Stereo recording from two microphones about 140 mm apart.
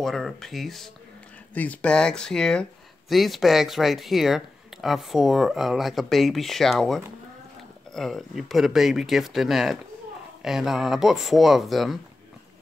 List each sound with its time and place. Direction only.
0.0 s speech: centre (ahead or behind)